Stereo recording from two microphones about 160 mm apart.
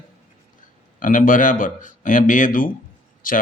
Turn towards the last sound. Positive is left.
turn(degrees=60)  # may be behind; listen again after turning